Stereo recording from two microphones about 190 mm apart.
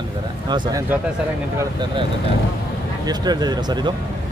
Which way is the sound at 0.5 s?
20° right (ahead or behind).